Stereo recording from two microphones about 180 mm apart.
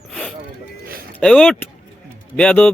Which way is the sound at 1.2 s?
5° left (ahead or behind).